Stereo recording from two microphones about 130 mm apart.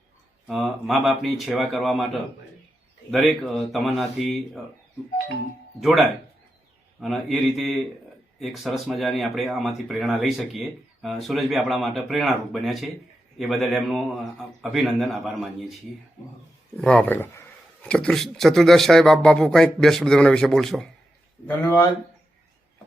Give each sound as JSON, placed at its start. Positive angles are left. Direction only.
{"t": 0.4, "sound": "speech", "side_deg": 0}
{"t": 3.1, "sound": "speech", "side_deg": 0}
{"t": 5.8, "sound": "speech", "side_deg": 0}
{"t": 16.7, "sound": "speech", "side_deg": 5}
{"t": 21.4, "sound": "speech", "side_deg": 20}